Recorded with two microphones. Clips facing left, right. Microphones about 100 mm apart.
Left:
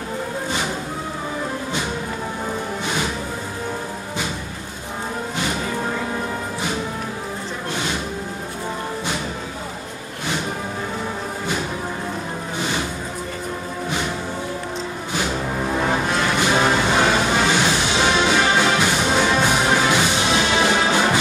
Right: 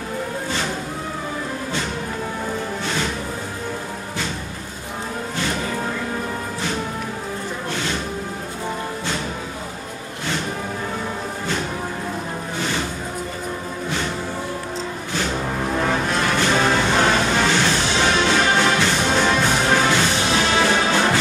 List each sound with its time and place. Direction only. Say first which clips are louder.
15.8 s music: even; 15° left (ahead or behind)